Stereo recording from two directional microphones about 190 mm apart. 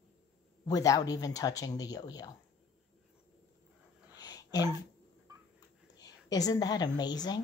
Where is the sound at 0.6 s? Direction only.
20° left (ahead or behind).